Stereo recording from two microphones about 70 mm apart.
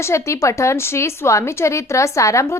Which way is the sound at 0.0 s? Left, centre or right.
Left.